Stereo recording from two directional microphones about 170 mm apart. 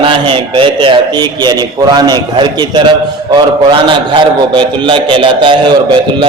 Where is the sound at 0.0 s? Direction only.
30° right (ahead or behind).